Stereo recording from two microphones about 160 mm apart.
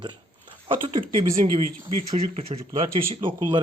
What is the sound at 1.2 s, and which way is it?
Speech, 25° right (ahead or behind).